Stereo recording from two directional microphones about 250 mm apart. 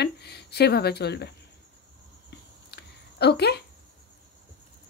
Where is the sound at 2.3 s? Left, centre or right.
Left.